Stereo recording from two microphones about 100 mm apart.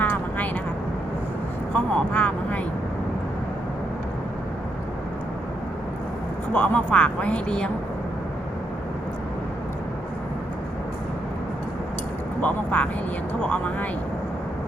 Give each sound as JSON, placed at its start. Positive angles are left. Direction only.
{"t": 0.0, "sound": "vehicle", "side_deg": 15}
{"t": 1.7, "sound": "vehicle", "side_deg": 15}
{"t": 6.5, "sound": "speech", "side_deg": 15}
{"t": 12.4, "sound": "speech", "side_deg": 15}